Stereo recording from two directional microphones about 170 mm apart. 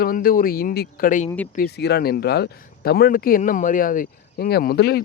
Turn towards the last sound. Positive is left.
turn(degrees=70)  # may be behind; listen again after turning